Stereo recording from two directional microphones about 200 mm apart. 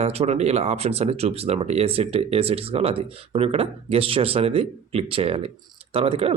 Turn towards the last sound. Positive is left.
turn(degrees=-30)  # may be behind; listen again after turning